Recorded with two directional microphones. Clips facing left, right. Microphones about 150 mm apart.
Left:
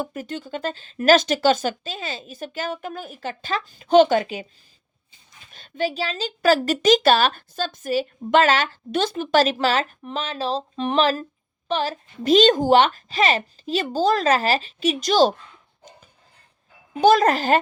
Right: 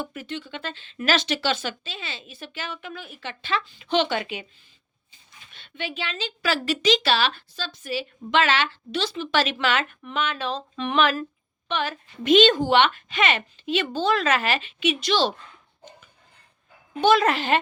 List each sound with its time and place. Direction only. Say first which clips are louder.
0.0 s speech: left 3 dB; 40° left (ahead or behind)
5.5 s a woman's voice: left 9 dB; 40° left (ahead or behind)
17.0 s a woman's voice: left 3 dB; 40° left (ahead or behind)